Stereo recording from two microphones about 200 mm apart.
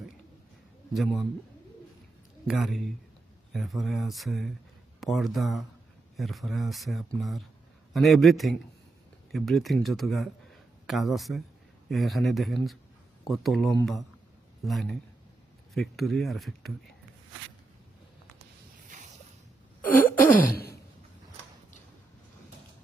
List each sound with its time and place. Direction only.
0.9 s speech: centre (ahead or behind)
2.5 s speech: centre (ahead or behind)
19.8 s a sound: 45° left (ahead or behind)